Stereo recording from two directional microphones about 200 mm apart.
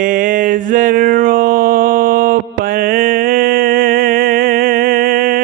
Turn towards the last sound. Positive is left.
turn(degrees=-45)  # may be behind; listen again after turning